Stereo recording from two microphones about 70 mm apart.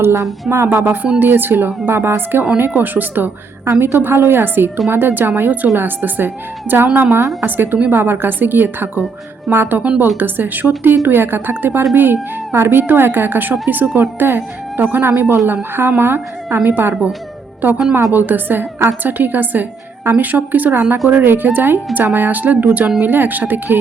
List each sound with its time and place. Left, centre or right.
0.0 s a woman's voice: right